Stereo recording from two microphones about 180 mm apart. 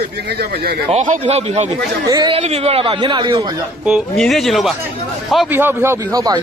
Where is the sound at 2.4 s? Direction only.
35° right (ahead or behind).